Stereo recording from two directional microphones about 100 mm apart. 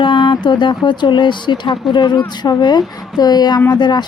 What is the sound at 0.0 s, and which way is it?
Speech, 55° left (ahead or behind).